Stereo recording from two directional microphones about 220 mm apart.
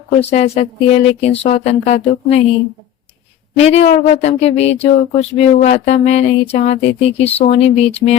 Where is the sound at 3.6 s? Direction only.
30° left (ahead or behind).